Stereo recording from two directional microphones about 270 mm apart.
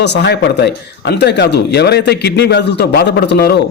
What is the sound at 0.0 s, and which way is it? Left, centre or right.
Speech, left.